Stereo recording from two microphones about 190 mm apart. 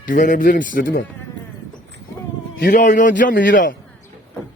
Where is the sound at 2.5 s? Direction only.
45° left (ahead or behind).